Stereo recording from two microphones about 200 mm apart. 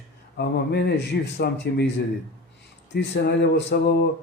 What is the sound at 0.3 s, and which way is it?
A man's voice, 55° left (ahead or behind).